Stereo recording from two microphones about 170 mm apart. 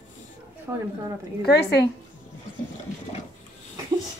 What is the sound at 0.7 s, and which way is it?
Speech, 20° right (ahead or behind).